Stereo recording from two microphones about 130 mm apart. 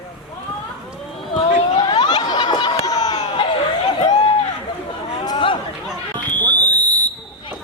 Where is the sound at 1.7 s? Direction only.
35° left (ahead or behind).